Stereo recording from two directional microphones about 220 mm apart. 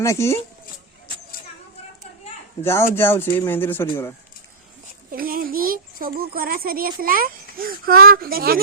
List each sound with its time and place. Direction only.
0.0 s speech: 10° left (ahead or behind)
2.6 s speech: 10° left (ahead or behind)
5.1 s a child's voice: 40° right (ahead or behind)